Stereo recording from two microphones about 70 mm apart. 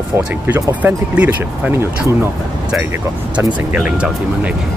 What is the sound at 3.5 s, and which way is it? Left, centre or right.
Speech, centre.